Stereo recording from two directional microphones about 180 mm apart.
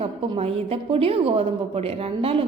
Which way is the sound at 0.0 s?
35° right (ahead or behind).